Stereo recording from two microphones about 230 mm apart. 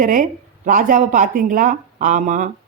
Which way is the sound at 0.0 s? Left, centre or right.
Right.